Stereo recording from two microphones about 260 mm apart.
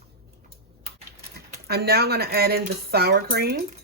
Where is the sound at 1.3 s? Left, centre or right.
Right.